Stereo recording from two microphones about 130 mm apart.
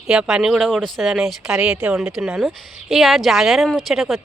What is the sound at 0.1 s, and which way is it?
Speech, 5° right (ahead or behind).